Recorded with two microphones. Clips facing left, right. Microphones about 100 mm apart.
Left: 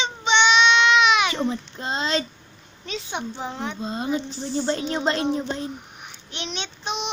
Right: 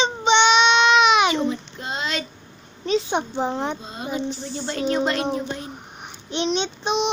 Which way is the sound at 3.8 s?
30° left (ahead or behind).